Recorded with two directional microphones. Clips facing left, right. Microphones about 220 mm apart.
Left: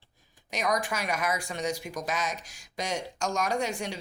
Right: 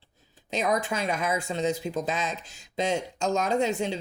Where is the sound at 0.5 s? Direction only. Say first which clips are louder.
Right 3 dB; 25° right (ahead or behind).